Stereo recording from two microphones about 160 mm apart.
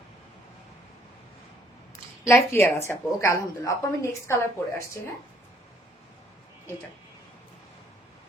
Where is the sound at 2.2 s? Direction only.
15° left (ahead or behind).